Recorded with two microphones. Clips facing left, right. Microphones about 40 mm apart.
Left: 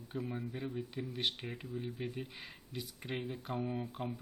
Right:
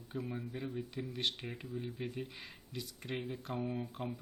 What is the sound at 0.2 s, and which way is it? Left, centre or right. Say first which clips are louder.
Speech: left 1 dB; centre.